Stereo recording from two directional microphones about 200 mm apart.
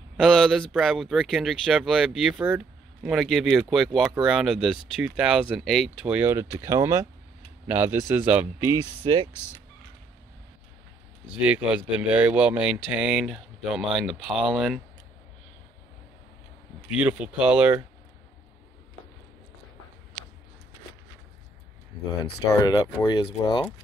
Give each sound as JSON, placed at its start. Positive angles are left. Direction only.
{"t": 0.2, "sound": "a man's voice", "side_deg": 0}
{"t": 9.0, "sound": "speech", "side_deg": -20}
{"t": 9.3, "sound": "speech", "side_deg": 15}
{"t": 11.3, "sound": "speech", "side_deg": -5}
{"t": 16.9, "sound": "a man's voice", "side_deg": -5}
{"t": 21.9, "sound": "speech", "side_deg": 20}